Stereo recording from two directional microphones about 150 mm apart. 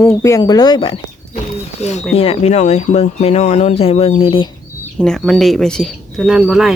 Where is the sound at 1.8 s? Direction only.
50° left (ahead or behind).